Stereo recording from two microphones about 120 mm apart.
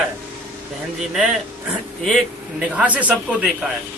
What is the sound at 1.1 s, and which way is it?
Speech, centre (ahead or behind).